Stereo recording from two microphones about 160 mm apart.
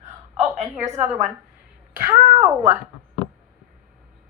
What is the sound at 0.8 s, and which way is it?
Speech, 15° right (ahead or behind).